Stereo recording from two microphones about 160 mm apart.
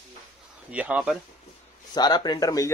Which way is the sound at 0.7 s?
10° right (ahead or behind).